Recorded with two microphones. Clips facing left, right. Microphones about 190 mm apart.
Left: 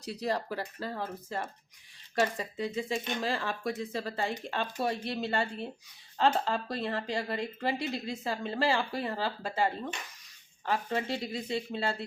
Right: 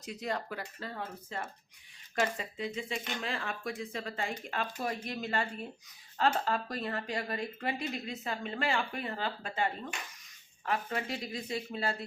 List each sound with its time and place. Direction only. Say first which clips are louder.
0.0 s speech: left 4 dB; 35° left (ahead or behind)
10.7 s speech: left 3 dB; 30° left (ahead or behind)